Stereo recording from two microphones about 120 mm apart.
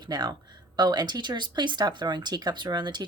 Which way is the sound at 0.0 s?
35° right (ahead or behind).